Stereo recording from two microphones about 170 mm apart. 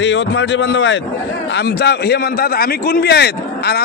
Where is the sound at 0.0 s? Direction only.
90° left.